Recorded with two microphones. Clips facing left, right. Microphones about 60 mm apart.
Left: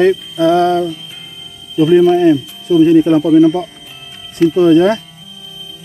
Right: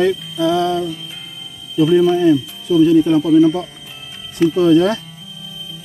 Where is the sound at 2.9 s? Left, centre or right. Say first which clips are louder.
Left 3 dB; left.